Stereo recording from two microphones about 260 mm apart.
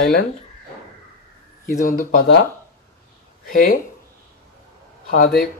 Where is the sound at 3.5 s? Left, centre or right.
Left.